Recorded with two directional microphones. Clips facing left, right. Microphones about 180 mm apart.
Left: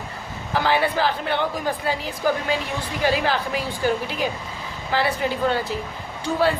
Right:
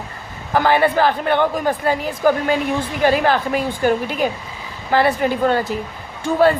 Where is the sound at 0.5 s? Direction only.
50° right (ahead or behind).